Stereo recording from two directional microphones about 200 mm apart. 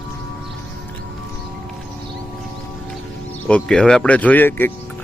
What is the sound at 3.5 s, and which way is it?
Speech, 5° left (ahead or behind).